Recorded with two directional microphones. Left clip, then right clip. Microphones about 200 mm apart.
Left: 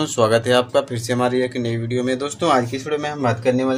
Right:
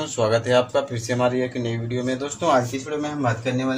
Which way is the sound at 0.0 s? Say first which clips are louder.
Left 4 dB; 35° left (ahead or behind).